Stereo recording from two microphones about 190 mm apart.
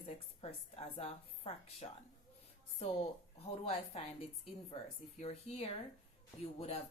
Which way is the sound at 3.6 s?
30° left (ahead or behind).